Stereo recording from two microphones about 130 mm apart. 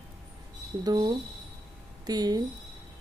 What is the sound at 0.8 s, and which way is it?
Speech, 30° right (ahead or behind).